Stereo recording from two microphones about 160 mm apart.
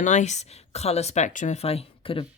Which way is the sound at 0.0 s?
50° left (ahead or behind).